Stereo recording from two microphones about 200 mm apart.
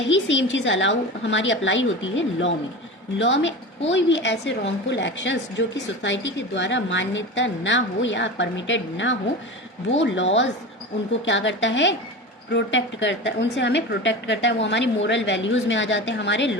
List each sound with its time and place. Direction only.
0.0 s a woman's voice: 65° left (ahead or behind)